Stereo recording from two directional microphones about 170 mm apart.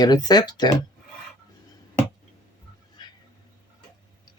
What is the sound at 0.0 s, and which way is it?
Speech, 25° left (ahead or behind).